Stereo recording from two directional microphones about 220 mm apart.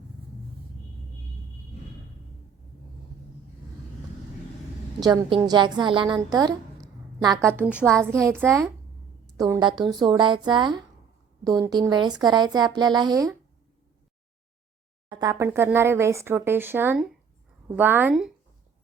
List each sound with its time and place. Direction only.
4.9 s speech: 15° right (ahead or behind); by 8.0 s centre (ahead or behind)
8.0 s speech: 10° right (ahead or behind)
15.1 s speech: 15° right (ahead or behind)